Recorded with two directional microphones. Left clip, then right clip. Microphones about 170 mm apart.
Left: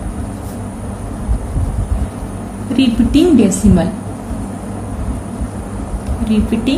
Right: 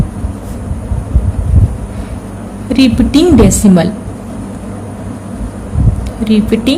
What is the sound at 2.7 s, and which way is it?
A woman's voice, 65° right (ahead or behind).